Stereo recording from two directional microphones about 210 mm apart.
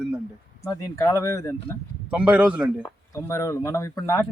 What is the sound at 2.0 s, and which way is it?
Speech, 5° right (ahead or behind).